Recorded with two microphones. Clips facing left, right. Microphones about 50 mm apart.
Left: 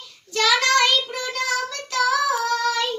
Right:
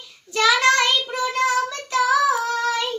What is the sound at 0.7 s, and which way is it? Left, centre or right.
Child singing, right.